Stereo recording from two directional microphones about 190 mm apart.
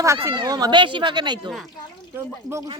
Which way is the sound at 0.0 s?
15° right (ahead or behind).